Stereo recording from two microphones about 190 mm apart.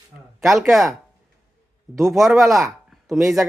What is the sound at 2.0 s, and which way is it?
Speech, centre (ahead or behind).